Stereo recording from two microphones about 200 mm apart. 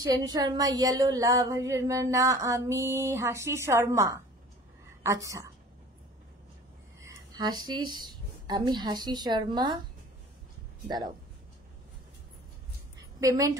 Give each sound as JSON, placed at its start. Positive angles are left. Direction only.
{"t": 0.0, "sound": "speech", "side_deg": -20}
{"t": 7.1, "sound": "a woman's voice", "side_deg": -20}
{"t": 13.2, "sound": "speech", "side_deg": -15}